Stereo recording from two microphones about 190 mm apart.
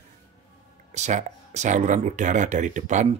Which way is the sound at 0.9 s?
40° right (ahead or behind).